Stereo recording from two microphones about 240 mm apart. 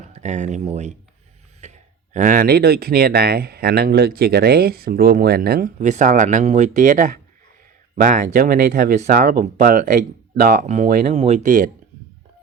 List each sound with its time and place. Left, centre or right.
0.0 s speech: right
1.6 s a sound: right
2.1 s speech: right